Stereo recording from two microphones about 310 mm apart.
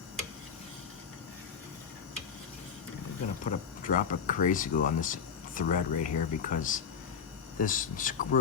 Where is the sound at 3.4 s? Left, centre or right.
Left.